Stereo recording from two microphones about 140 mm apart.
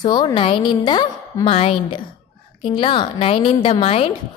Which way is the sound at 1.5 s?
45° left (ahead or behind).